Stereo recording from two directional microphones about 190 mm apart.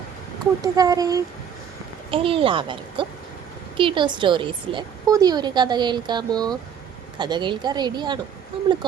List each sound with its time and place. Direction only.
0.6 s a woman's voice: 20° right (ahead or behind)
2.0 s a woman's voice: 30° right (ahead or behind)